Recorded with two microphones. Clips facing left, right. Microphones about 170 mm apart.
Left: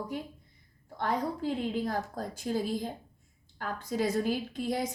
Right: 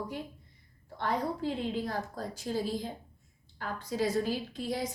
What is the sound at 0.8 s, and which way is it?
A woman's voice, 45° left (ahead or behind).